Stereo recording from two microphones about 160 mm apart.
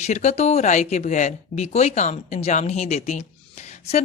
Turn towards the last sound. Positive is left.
turn(degrees=45)  # may be behind; listen again after turning